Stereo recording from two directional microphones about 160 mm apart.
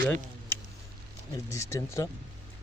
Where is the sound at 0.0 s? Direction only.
10° left (ahead or behind).